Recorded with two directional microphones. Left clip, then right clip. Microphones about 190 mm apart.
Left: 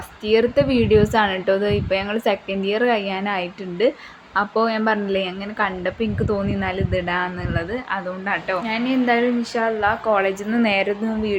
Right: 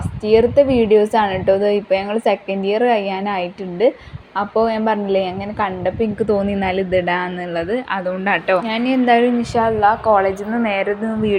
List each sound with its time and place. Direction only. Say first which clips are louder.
0.3 s a woman's voice: right 5 dB; 5° right (ahead or behind)
6.3 s speech: right 5 dB; 20° right (ahead or behind); by 10.3 s 5° right (ahead or behind)
10.5 s a woman's voice: right 1 dB; 15° left (ahead or behind)